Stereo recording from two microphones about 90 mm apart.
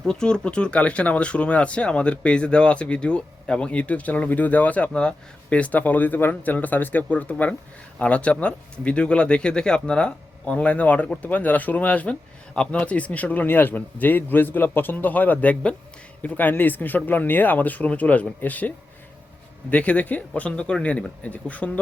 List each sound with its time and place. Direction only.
0.0 s speech: 10° left (ahead or behind)
19.7 s speech: 15° left (ahead or behind)